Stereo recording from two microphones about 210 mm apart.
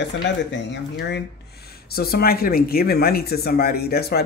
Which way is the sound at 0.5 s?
55° left (ahead or behind).